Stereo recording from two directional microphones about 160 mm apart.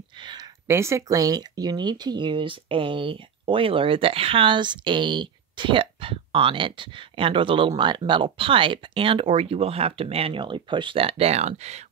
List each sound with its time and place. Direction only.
0.2 s speech: 25° right (ahead or behind); by 11.8 s 45° right (ahead or behind)